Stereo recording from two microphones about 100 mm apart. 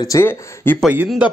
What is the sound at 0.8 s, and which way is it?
Speech, 15° right (ahead or behind).